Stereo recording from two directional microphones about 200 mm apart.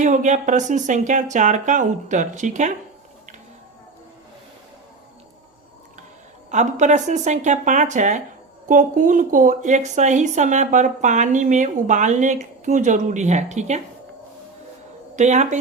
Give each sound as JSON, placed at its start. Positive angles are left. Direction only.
{"t": 0.0, "sound": "a woman's voice", "side_deg": -40}
{"t": 6.5, "sound": "a woman's voice", "side_deg": -35}
{"t": 15.1, "sound": "speech", "side_deg": -35}